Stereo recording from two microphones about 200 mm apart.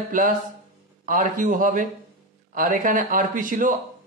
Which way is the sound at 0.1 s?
40° right (ahead or behind).